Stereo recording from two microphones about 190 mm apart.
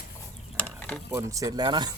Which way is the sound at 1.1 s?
15° right (ahead or behind).